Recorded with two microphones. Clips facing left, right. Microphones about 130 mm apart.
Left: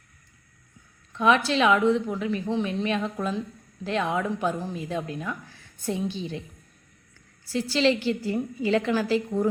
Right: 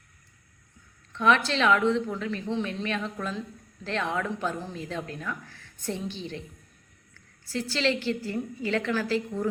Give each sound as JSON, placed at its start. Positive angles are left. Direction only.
{"t": 1.1, "sound": "speech", "side_deg": 10}
{"t": 7.4, "sound": "speech", "side_deg": 15}